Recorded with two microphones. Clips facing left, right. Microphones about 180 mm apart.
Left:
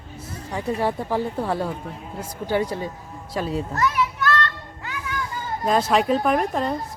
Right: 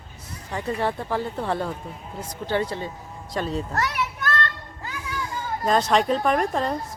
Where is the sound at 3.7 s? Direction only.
70° right (ahead or behind).